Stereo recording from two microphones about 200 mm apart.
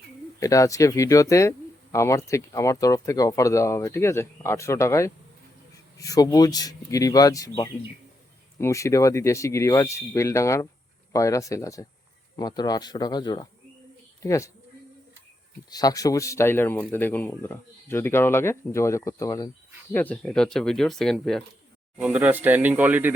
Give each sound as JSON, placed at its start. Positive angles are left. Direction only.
{"t": 0.3, "sound": "speech", "side_deg": 15}
{"t": 15.7, "sound": "speech", "side_deg": 20}